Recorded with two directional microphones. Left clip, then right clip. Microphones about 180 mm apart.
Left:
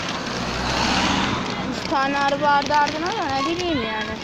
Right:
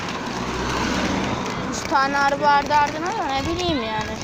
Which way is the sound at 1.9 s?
10° left (ahead or behind).